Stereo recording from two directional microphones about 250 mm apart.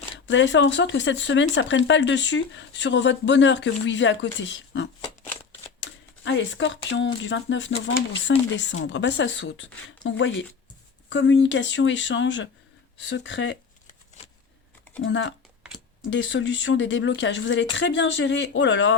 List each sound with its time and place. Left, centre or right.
0.3 s speech: left
5.0 s shuffling cards: centre
5.8 s speech: left
15.0 s speech: left